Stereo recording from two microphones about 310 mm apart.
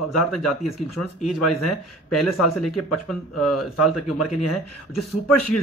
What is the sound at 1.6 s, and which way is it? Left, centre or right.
Speech, left.